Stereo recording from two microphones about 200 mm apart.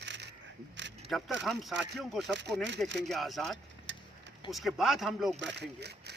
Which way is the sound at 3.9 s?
65° right (ahead or behind).